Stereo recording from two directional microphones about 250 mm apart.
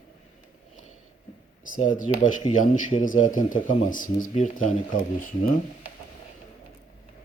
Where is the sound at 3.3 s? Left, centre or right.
Left.